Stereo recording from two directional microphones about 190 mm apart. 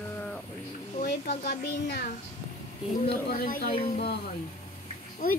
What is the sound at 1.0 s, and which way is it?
Speech, 50° left (ahead or behind).